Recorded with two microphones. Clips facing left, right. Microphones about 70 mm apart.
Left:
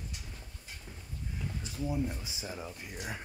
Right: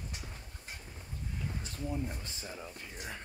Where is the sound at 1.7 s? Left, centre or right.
Centre.